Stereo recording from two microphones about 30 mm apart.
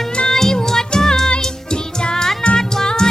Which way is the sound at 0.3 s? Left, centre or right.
Centre.